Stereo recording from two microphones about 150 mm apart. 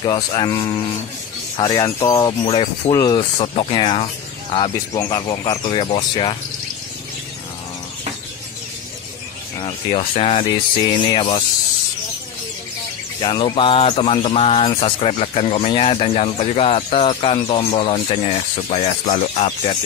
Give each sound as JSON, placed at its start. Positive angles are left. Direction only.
{"t": 0.0, "sound": "speech", "side_deg": 30}
{"t": 2.4, "sound": "speech", "side_deg": 45}
{"t": 2.9, "sound": "speech", "side_deg": 25}
{"t": 4.9, "sound": "speech", "side_deg": 25}
{"t": 9.6, "sound": "speech", "side_deg": 40}
{"t": 11.1, "sound": "speech", "side_deg": 30}
{"t": 13.2, "sound": "speech", "side_deg": 35}